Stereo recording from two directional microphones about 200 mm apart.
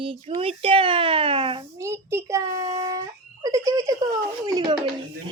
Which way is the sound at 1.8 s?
15° right (ahead or behind).